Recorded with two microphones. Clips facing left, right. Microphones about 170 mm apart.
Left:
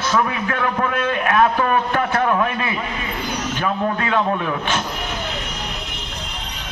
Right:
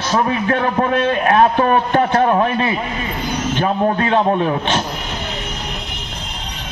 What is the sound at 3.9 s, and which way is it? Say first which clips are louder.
Speech: right 4 dB; 30° right (ahead or behind).